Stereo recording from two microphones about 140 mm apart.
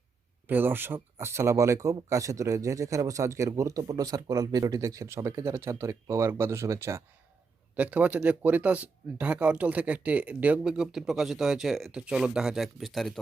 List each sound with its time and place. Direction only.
0.4 s speech: 15° right (ahead or behind); by 13.1 s centre (ahead or behind)